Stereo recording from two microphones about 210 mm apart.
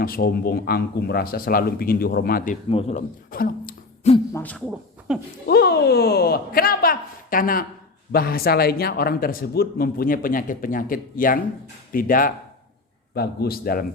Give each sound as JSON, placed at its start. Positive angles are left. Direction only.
{"t": 0.0, "sound": "a man's voice", "side_deg": 45}
{"t": 2.6, "sound": "speech", "side_deg": 30}
{"t": 3.3, "sound": "a sound", "side_deg": 40}
{"t": 4.4, "sound": "hoot", "side_deg": 5}
{"t": 5.1, "sound": "speech", "side_deg": -5}
{"t": 5.5, "sound": "a man's voice", "side_deg": 50}